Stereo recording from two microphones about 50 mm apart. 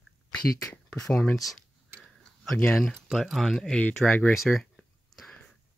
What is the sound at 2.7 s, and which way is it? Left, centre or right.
Speech, centre.